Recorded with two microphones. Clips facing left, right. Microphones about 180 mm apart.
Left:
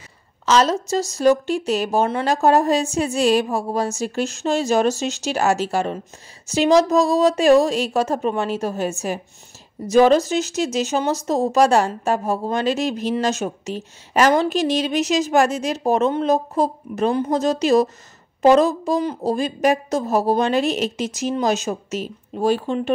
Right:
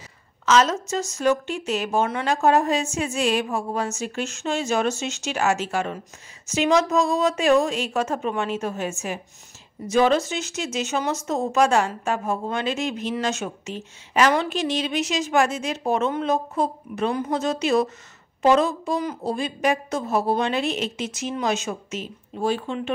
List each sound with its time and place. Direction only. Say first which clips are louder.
0.5 s speech: left 2 dB; 35° left (ahead or behind)